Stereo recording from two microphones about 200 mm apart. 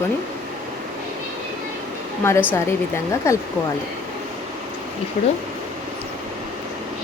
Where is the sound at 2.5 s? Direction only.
10° left (ahead or behind).